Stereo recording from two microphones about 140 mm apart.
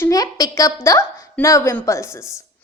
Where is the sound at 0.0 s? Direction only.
25° left (ahead or behind).